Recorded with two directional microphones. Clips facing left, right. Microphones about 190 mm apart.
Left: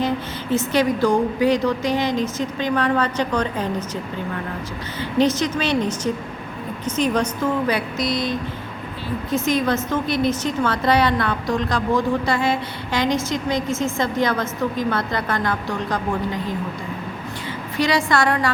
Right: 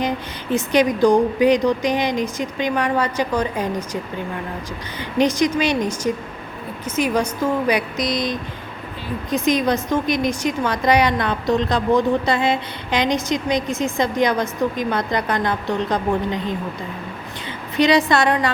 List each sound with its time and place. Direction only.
0.5 s a woman's voice: 15° right (ahead or behind)
4.9 s a woman's voice: 15° right (ahead or behind)
17.7 s a woman's voice: 20° right (ahead or behind)